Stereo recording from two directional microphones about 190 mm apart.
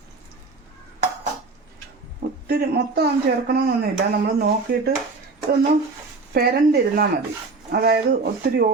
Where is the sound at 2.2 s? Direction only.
55° right (ahead or behind).